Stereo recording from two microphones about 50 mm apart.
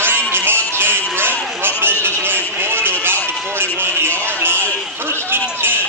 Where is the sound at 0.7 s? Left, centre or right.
Right.